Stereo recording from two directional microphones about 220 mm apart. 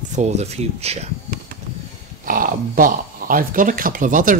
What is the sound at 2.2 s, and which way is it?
Speech, 40° right (ahead or behind).